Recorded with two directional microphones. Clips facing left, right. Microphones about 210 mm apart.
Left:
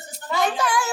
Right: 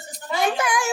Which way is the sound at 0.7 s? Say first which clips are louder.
Even; 15° right (ahead or behind).